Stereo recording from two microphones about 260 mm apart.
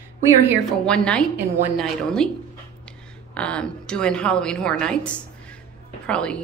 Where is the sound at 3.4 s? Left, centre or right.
Centre.